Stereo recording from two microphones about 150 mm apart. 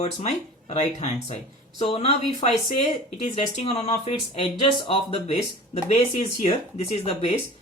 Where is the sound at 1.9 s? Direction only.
40° left (ahead or behind).